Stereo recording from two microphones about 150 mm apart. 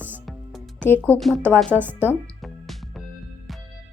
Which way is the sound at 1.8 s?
15° right (ahead or behind).